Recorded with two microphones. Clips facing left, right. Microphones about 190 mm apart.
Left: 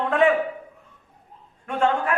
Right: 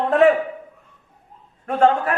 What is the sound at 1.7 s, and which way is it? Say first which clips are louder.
Speech: right 5 dB; 40° right (ahead or behind).